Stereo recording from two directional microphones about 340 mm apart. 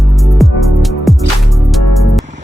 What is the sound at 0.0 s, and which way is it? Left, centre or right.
Music, centre.